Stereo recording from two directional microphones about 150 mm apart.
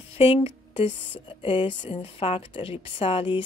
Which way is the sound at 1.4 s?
35° left (ahead or behind).